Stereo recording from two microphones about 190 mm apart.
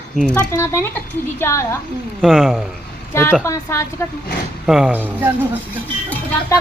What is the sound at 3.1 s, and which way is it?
Speech, 15° left (ahead or behind).